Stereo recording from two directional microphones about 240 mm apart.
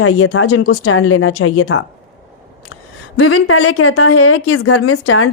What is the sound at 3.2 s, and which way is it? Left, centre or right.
Speech, left.